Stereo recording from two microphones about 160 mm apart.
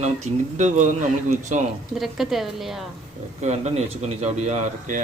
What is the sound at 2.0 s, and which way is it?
Speech, centre (ahead or behind).